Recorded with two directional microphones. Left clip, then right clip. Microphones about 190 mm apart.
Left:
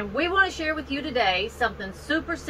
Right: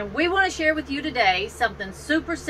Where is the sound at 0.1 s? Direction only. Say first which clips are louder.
Right 1 dB; 15° right (ahead or behind).